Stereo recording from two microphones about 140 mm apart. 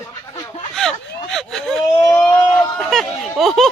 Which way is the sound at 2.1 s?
20° left (ahead or behind).